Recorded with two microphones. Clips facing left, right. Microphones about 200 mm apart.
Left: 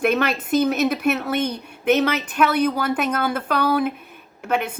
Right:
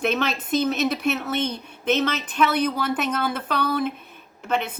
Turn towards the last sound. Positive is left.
turn(degrees=10)  # may be behind; listen again after turning